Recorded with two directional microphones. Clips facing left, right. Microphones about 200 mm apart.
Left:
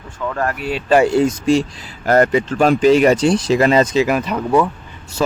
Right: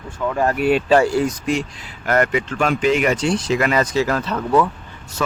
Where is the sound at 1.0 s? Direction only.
25° left (ahead or behind).